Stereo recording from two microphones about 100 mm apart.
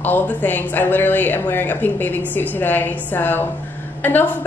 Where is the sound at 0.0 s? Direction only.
15° left (ahead or behind).